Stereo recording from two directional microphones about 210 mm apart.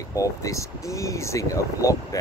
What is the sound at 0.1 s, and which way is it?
Speech, 15° left (ahead or behind).